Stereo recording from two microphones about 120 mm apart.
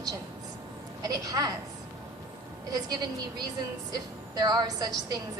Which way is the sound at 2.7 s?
35° right (ahead or behind).